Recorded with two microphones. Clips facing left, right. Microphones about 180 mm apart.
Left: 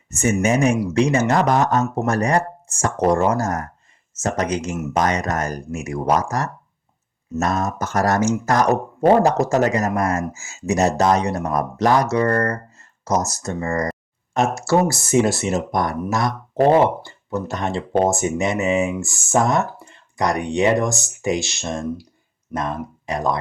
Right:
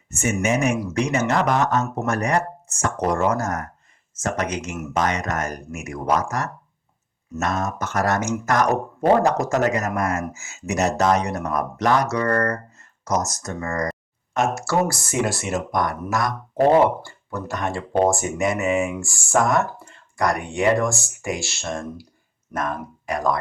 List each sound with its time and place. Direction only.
0.4 s speech: 30° left (ahead or behind)